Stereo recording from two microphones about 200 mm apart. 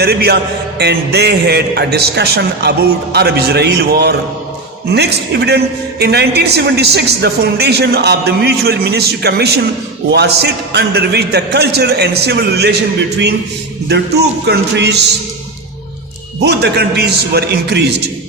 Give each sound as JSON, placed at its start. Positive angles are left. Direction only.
{"t": 0.0, "sound": "a man's voice", "side_deg": -55}
{"t": 13.8, "sound": "a man's voice", "side_deg": -55}
{"t": 16.4, "sound": "a man's voice", "side_deg": -55}